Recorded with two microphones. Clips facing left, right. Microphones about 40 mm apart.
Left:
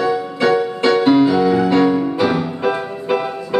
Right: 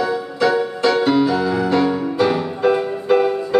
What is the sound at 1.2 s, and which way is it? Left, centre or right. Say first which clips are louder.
Music: left 4 dB; left.